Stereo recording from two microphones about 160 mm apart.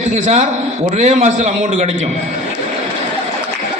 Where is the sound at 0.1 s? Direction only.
45° right (ahead or behind).